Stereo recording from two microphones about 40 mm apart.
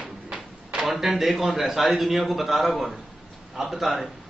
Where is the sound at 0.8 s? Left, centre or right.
Centre.